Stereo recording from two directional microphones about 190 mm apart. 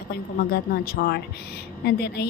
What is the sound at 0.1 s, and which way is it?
A woman's voice, 55° left (ahead or behind).